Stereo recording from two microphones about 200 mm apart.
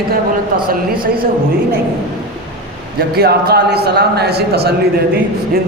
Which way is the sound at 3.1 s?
50° right (ahead or behind).